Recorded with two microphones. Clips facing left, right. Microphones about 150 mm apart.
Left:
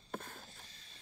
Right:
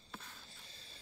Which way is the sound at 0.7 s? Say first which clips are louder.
Right 3 dB; 30° right (ahead or behind).